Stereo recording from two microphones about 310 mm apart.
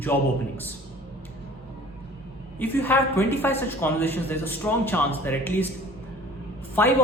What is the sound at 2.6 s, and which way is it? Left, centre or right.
A man's voice, centre.